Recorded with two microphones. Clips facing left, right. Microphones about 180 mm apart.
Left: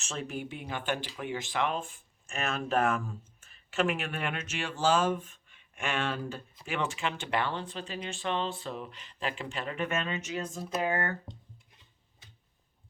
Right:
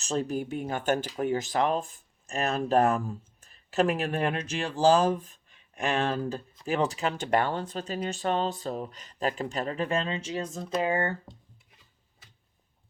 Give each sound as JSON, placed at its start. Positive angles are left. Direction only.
{"t": 0.0, "sound": "speech", "side_deg": -35}
{"t": 10.5, "sound": "speech", "side_deg": 5}
{"t": 10.8, "sound": "speech", "side_deg": -30}